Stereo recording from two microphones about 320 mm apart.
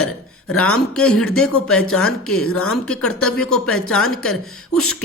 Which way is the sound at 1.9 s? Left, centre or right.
Centre.